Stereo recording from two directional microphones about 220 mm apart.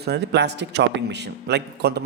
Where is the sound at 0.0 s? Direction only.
50° right (ahead or behind).